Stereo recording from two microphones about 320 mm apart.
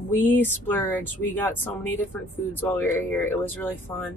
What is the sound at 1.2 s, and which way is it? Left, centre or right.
Speech, left.